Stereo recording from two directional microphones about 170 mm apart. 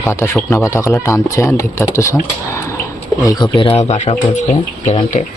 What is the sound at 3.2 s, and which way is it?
Speech, 25° left (ahead or behind).